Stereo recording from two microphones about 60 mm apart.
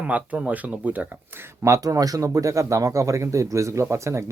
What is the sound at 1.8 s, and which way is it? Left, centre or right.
Speech, right.